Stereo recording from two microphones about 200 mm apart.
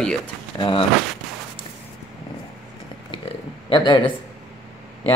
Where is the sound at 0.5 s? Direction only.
25° left (ahead or behind).